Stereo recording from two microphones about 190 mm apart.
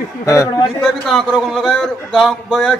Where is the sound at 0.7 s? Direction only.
Centre (ahead or behind).